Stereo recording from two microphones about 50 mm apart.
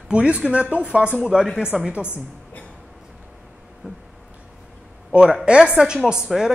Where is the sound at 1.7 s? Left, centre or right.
Centre.